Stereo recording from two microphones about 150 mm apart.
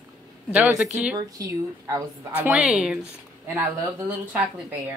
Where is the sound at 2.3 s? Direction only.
10° right (ahead or behind).